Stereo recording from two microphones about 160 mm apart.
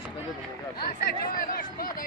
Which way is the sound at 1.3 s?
65° left (ahead or behind).